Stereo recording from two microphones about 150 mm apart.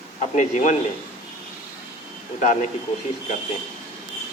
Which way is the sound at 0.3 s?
55° left (ahead or behind).